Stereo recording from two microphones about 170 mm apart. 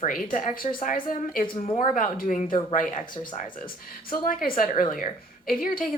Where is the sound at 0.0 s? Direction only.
50° left (ahead or behind).